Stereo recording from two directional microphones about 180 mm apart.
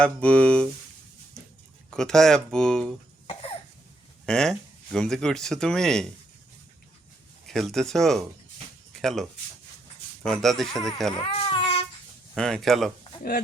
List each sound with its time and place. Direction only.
0.0 s speech: 5° left (ahead or behind)
1.9 s speech: 5° left (ahead or behind)
4.3 s speech: 5° left (ahead or behind)
7.4 s speech: centre (ahead or behind)
10.4 s speech: centre (ahead or behind)
11.1 s babbling: 30° left (ahead or behind)
12.3 s speech: centre (ahead or behind)